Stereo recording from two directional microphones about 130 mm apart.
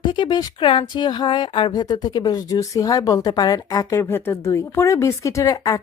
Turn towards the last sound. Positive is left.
turn(degrees=30)  # may be behind; listen again after turning